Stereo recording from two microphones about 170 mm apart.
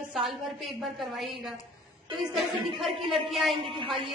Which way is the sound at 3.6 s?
30° right (ahead or behind).